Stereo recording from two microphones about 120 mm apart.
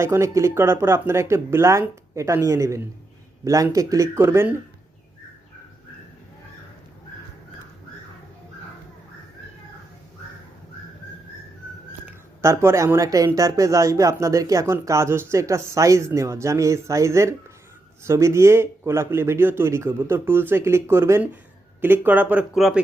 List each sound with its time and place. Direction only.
0.0 s speech: 25° right (ahead or behind)
12.4 s speech: 25° right (ahead or behind)
22.5 s speech: centre (ahead or behind)